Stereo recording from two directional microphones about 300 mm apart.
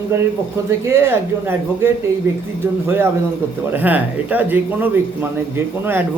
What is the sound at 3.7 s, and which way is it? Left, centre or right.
Speech, centre.